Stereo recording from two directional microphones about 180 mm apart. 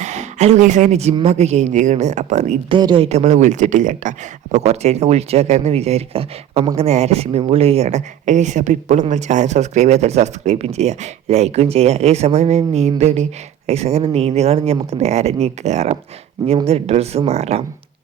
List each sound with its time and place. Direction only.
0.0 s speech: 40° right (ahead or behind)
2.7 s speech: 25° right (ahead or behind)